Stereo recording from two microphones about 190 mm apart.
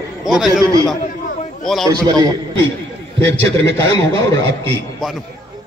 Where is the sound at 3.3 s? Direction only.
75° right (ahead or behind).